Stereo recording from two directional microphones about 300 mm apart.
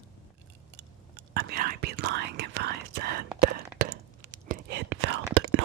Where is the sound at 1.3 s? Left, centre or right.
Right.